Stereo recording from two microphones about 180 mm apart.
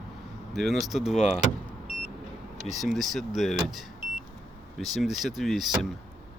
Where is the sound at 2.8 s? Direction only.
Centre (ahead or behind).